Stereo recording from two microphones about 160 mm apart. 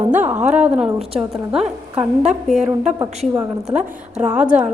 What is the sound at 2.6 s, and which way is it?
Speech, 45° right (ahead or behind).